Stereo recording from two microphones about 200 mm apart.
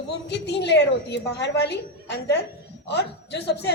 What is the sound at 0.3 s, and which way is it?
A woman's voice, 60° left (ahead or behind).